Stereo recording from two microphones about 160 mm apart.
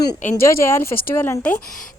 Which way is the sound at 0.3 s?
15° left (ahead or behind).